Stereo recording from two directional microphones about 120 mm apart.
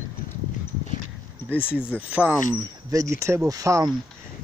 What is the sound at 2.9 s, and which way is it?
Speech, 25° right (ahead or behind).